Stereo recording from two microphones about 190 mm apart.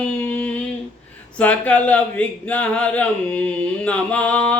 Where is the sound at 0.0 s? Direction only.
5° left (ahead or behind).